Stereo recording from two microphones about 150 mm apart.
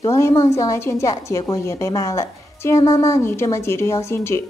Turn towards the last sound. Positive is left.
turn(degrees=15)  # may be behind; listen again after turning